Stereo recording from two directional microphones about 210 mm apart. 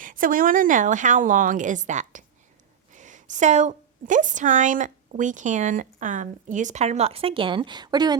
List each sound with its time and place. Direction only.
0.0 s a woman's voice: 40° right (ahead or behind); by 8.1 s 20° right (ahead or behind)